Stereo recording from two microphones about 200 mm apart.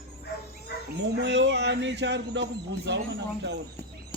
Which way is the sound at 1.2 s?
60° right (ahead or behind).